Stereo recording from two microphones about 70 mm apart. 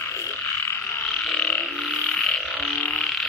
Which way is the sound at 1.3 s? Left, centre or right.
Centre.